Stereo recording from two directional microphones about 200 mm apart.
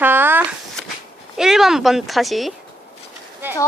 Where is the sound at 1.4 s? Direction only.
Centre (ahead or behind).